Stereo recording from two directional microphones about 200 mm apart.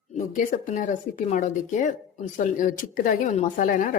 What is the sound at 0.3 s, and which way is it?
A woman's voice, 40° left (ahead or behind).